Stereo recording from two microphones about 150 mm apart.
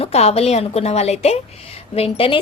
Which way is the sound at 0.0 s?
45° left (ahead or behind).